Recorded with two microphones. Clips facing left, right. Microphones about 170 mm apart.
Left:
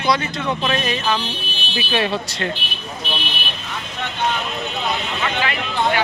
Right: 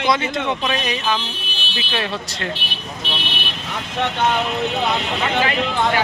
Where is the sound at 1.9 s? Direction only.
5° left (ahead or behind).